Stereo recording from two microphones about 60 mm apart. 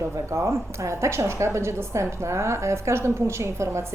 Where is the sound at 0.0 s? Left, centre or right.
Right.